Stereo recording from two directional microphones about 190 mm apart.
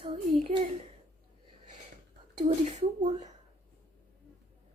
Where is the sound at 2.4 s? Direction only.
35° right (ahead or behind).